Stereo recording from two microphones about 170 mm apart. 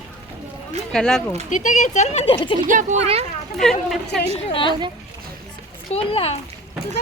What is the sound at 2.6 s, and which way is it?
Speech, 45° right (ahead or behind).